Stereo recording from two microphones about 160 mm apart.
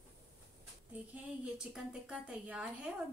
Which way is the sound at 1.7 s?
5° right (ahead or behind).